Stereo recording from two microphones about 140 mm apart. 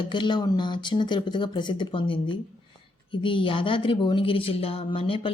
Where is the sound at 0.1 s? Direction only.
35° left (ahead or behind).